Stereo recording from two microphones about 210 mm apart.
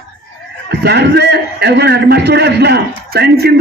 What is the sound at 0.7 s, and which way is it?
A man's voice, 55° right (ahead or behind).